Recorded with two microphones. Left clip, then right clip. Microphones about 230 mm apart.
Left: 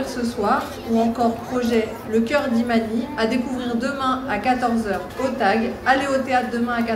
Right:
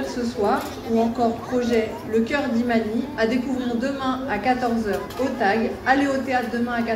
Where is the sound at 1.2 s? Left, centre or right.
Left.